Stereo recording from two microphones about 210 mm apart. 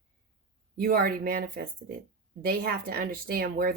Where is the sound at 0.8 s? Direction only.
45° right (ahead or behind).